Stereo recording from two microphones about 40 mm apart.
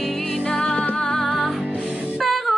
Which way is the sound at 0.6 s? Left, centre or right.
Left.